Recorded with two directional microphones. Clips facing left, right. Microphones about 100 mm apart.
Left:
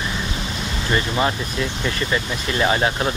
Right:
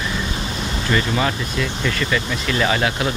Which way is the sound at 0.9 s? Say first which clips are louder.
Even; 25° left (ahead or behind).